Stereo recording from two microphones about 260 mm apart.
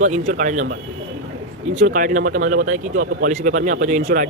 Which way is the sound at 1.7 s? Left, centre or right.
Right.